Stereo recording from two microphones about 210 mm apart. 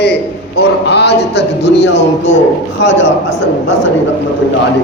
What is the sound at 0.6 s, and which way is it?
Speech, 55° left (ahead or behind).